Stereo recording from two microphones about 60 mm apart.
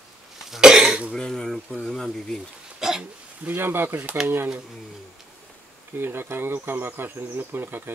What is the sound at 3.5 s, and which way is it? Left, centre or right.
Speech, right.